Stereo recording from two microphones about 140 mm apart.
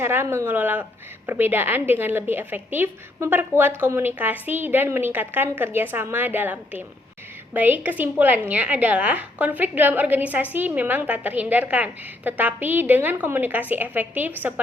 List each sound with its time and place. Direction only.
0.0 s a woman's voice: 15° right (ahead or behind)